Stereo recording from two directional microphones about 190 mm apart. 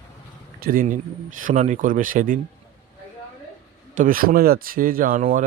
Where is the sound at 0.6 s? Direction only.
45° right (ahead or behind).